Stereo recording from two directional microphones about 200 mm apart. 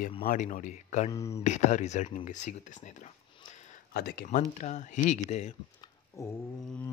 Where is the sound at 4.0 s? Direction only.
50° left (ahead or behind).